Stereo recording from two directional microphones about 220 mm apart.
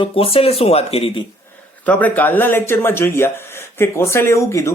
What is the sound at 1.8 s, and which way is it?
Speech, 5° left (ahead or behind).